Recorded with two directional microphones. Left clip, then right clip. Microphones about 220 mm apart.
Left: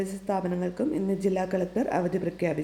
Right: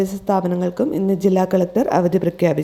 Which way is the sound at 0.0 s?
35° right (ahead or behind).